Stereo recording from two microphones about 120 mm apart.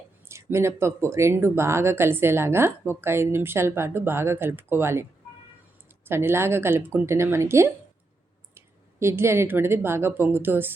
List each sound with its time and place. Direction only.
0.3 s speech: 20° right (ahead or behind)
6.1 s speech: 20° right (ahead or behind)